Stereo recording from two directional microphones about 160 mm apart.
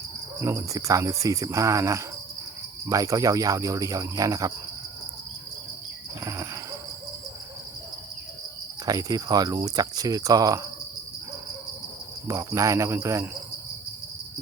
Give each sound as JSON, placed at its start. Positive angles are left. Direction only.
{"t": 0.4, "sound": "cricket", "side_deg": -20}
{"t": 6.2, "sound": "a sound", "side_deg": -20}
{"t": 8.9, "sound": "cricket", "side_deg": -25}
{"t": 12.3, "sound": "cricket", "side_deg": -20}